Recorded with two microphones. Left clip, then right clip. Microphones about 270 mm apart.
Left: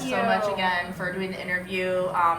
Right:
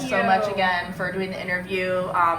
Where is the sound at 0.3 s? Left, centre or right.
Centre.